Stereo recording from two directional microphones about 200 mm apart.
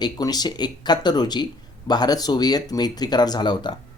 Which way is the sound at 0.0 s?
20° left (ahead or behind).